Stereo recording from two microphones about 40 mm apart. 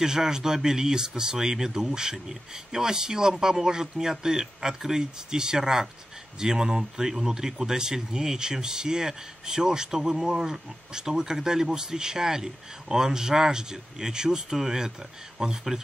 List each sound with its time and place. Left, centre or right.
0.0 s speech: centre